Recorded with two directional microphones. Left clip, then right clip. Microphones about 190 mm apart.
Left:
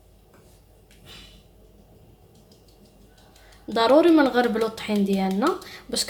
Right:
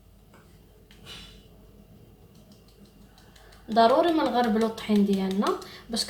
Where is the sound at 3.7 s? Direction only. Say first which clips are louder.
Left 3 dB; 55° left (ahead or behind).